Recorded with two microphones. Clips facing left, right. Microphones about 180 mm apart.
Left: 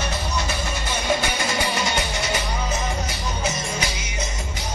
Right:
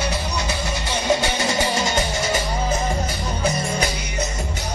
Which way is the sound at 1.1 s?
30° right (ahead or behind).